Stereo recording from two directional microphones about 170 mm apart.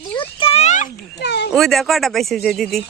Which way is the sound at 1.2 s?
80° left.